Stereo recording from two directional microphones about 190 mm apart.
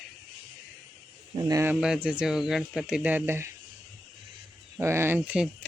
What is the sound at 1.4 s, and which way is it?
Speech, 20° right (ahead or behind).